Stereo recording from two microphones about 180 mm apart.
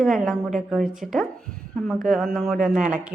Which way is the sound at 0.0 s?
Centre (ahead or behind).